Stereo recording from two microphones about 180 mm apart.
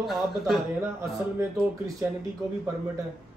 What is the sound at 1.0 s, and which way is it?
Speech, 15° right (ahead or behind).